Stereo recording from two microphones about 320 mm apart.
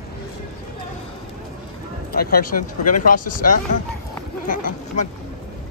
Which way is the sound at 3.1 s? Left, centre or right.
Left.